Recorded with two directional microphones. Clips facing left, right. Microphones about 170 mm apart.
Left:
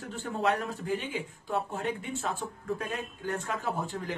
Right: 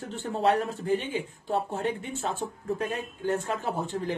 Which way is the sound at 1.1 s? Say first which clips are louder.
Right 4 dB; 30° right (ahead or behind).